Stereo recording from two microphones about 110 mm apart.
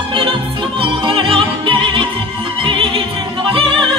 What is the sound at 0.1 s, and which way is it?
Music, 50° right (ahead or behind).